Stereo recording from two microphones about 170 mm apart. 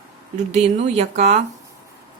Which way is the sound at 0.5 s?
40° right (ahead or behind).